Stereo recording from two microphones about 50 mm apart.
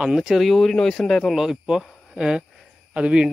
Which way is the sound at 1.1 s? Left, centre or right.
Centre.